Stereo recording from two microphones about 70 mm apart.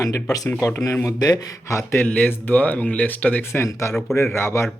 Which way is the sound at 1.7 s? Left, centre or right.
Left.